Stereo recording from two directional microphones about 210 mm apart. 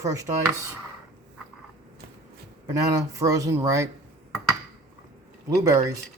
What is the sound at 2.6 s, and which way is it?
Speech, 15° right (ahead or behind).